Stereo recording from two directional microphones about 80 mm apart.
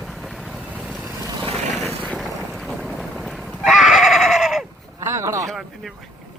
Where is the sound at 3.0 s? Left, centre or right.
Centre.